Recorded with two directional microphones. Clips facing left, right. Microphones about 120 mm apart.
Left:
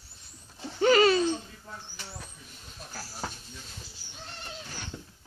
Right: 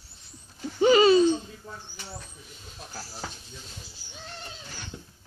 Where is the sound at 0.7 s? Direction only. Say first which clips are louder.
Right 3 dB; 20° right (ahead or behind).